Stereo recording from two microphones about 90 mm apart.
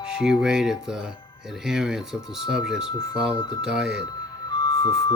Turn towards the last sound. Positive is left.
turn(degrees=50)  # may be behind; listen again after turning